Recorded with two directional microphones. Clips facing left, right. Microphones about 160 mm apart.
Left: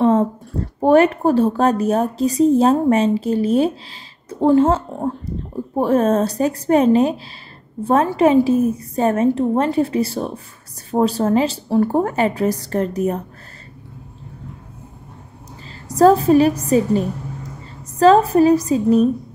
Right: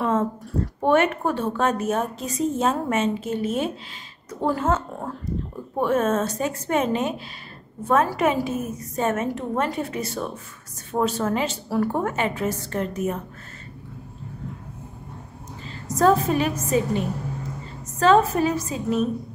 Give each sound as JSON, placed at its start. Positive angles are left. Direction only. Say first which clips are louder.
{"t": 0.0, "sound": "a sound", "louder": "left 7 dB", "side_deg": 35}
{"t": 0.7, "sound": "a woman's voice", "louder": "left 7 dB", "side_deg": 35}
{"t": 15.6, "sound": "a woman's voice", "louder": "left 7 dB", "side_deg": 35}